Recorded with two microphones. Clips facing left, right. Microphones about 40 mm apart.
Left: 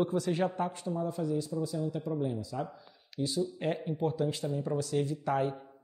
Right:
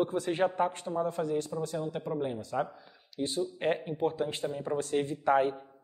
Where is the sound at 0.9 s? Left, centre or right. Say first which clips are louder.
Right 2 dB; right.